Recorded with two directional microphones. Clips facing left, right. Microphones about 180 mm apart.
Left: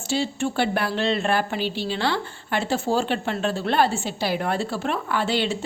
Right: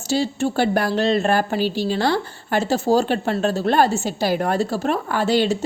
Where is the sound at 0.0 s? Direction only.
40° right (ahead or behind).